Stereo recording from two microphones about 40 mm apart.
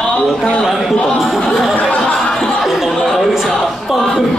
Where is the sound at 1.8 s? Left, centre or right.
Left.